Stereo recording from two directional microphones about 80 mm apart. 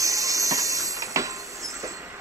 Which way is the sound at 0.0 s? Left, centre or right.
Right.